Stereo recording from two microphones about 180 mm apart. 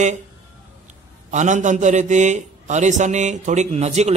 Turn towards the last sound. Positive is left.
turn(degrees=-35)  # may be behind; listen again after turning